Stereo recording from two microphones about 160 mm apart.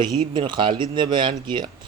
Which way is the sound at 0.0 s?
30° right (ahead or behind).